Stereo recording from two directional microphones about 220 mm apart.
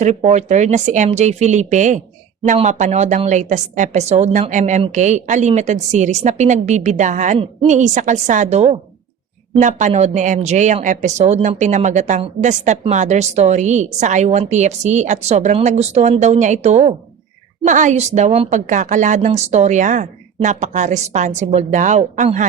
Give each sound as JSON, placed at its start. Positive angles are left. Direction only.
{"t": 0.0, "sound": "speech", "side_deg": -30}